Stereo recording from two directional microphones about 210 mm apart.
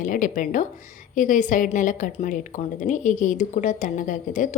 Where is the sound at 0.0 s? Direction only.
40° left (ahead or behind).